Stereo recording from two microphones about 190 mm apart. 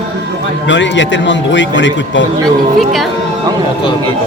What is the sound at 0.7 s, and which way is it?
Speech, 75° left (ahead or behind).